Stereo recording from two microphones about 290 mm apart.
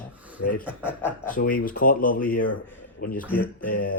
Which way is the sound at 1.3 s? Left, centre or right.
Left.